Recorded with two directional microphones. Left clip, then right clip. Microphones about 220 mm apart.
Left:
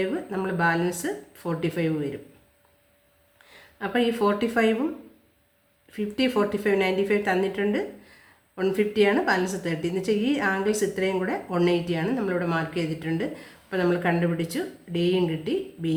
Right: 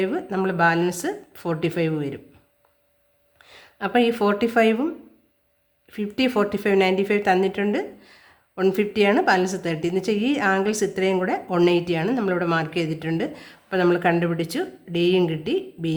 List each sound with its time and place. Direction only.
0.0 s speech: 35° right (ahead or behind)
3.4 s speech: 40° right (ahead or behind)
5.9 s speech: 35° right (ahead or behind)